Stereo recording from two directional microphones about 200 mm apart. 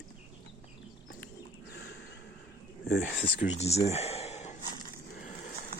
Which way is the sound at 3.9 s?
30° left (ahead or behind).